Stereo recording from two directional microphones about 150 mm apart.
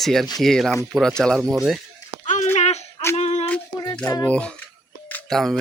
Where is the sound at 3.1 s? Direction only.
45° left (ahead or behind).